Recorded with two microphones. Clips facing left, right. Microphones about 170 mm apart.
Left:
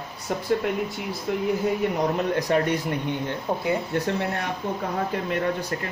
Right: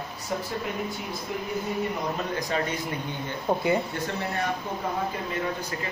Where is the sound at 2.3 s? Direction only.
65° left (ahead or behind).